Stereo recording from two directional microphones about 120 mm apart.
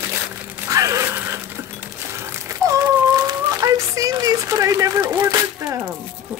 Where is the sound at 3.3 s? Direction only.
30° right (ahead or behind).